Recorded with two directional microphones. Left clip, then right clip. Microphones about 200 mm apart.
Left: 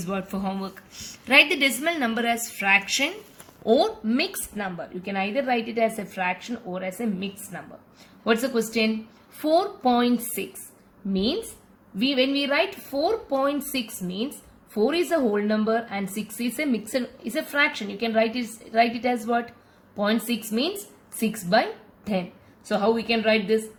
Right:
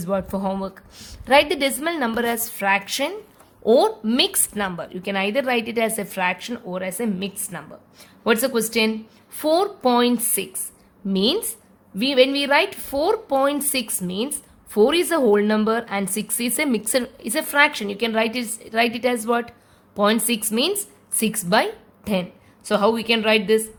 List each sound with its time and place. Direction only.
0.0 s a woman's voice: 55° right (ahead or behind)